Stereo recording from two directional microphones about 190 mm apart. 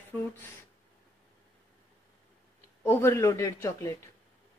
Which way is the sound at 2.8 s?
15° left (ahead or behind).